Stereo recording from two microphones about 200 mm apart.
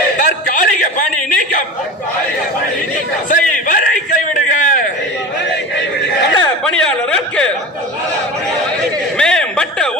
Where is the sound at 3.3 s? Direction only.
40° left (ahead or behind).